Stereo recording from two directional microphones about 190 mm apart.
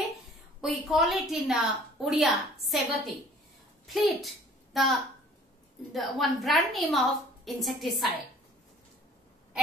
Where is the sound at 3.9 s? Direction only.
Centre (ahead or behind).